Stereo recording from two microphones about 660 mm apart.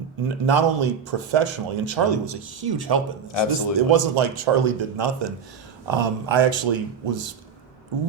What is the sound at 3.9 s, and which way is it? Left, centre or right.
Speech, right.